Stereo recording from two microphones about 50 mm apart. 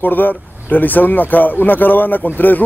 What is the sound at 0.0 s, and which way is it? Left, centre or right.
Speech, left.